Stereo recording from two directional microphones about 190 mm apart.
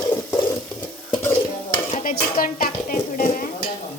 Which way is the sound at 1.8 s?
45° left (ahead or behind).